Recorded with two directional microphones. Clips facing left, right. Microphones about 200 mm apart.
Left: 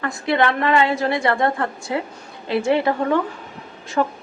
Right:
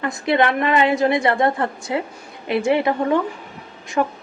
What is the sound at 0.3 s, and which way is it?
A woman's voice, 20° right (ahead or behind).